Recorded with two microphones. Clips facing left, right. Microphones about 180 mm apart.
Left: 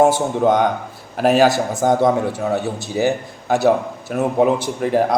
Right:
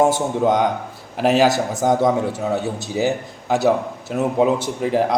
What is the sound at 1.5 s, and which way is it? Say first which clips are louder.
A man's voice: left 1 dB; 20° right (ahead or behind).